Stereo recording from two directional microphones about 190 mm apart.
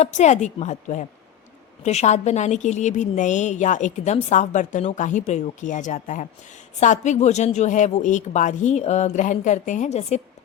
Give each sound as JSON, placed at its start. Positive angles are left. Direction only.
{"t": 0.0, "sound": "a woman's voice", "side_deg": 40}